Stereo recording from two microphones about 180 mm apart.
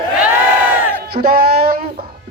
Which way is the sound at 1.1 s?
60° right (ahead or behind).